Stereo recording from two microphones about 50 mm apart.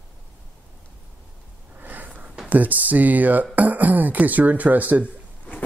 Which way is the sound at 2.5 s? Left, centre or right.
Right.